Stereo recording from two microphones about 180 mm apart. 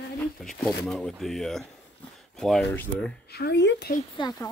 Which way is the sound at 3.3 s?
65° left (ahead or behind).